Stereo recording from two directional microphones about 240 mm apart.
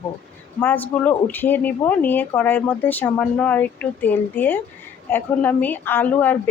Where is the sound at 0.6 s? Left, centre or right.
Centre.